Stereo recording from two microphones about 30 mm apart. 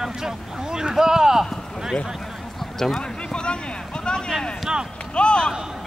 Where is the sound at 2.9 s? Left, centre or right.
Left.